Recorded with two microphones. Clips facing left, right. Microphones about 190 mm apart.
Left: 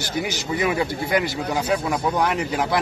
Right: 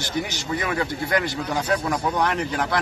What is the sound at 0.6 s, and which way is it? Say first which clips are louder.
Speech: left 5 dB; 10° left (ahead or behind).